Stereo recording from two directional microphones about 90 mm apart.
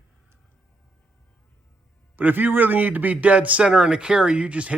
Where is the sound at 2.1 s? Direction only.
20° right (ahead or behind).